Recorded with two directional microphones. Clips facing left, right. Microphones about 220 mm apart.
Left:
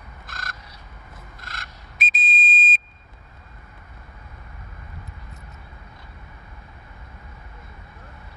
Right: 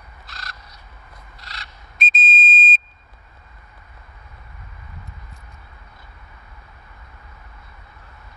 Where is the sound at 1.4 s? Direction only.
50° left (ahead or behind).